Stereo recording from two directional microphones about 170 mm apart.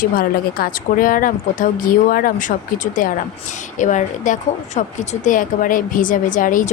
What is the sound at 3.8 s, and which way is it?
Speech, 50° left (ahead or behind).